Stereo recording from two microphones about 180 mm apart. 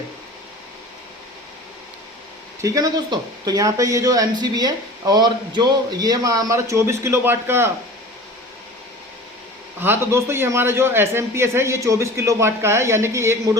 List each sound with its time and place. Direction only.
2.6 s speech: 20° right (ahead or behind)
9.8 s a man's voice: 15° right (ahead or behind)